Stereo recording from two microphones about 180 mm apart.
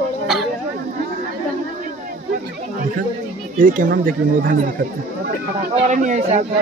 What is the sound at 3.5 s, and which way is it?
Speech, 50° right (ahead or behind).